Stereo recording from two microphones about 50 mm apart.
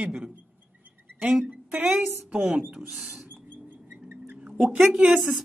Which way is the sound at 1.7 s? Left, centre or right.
Right.